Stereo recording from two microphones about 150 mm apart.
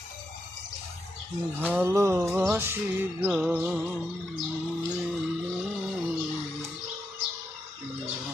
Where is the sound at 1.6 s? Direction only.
15° right (ahead or behind).